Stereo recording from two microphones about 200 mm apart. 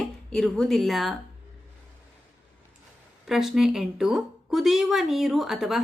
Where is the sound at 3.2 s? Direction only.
Centre (ahead or behind).